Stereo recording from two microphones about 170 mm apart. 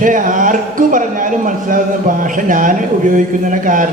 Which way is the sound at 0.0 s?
50° right (ahead or behind).